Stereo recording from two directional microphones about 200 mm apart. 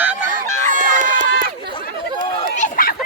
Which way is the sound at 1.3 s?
45° right (ahead or behind).